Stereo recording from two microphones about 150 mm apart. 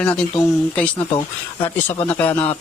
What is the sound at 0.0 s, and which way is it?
A man's voice, 5° left (ahead or behind).